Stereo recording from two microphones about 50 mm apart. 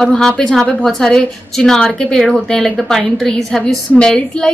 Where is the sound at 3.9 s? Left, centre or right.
Centre.